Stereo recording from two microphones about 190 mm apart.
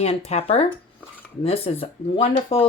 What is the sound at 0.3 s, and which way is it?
Speech, 35° left (ahead or behind).